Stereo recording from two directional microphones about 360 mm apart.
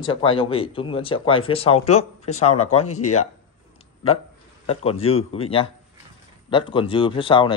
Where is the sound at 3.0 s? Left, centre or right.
Left.